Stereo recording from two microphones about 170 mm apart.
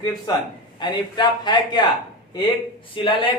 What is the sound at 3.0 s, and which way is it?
Speech, 30° left (ahead or behind).